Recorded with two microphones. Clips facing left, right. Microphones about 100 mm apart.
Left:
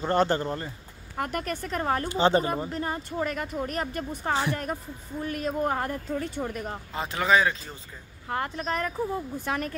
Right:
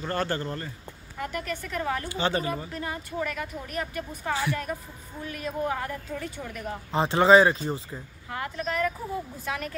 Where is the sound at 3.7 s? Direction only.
40° left (ahead or behind).